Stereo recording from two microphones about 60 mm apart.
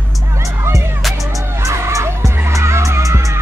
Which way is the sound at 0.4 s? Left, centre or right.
Right.